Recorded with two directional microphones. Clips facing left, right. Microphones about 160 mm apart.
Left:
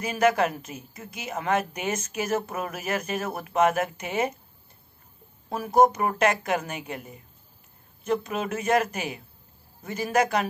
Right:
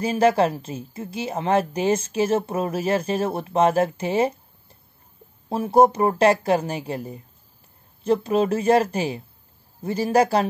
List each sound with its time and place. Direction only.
0.0 s a woman's voice: 30° right (ahead or behind)